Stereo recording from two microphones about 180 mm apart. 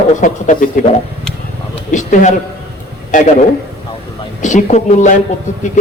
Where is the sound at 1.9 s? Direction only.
45° left (ahead or behind).